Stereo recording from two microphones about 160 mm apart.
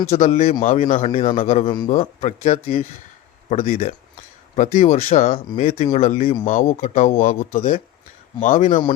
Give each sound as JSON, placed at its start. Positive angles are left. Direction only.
{"t": 0.1, "sound": "a man's voice", "side_deg": 40}